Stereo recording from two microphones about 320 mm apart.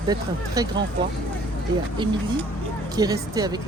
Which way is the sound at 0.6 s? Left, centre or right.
Centre.